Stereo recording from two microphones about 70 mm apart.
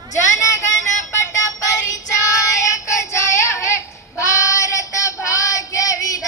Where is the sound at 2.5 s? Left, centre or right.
Left.